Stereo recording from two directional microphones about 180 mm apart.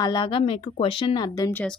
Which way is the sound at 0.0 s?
25° left (ahead or behind).